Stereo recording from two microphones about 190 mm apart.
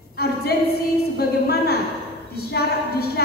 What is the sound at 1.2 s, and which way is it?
A woman's voice, 55° left (ahead or behind).